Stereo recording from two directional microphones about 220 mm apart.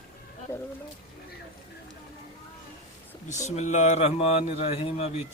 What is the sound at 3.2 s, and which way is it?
Speech, 30° left (ahead or behind).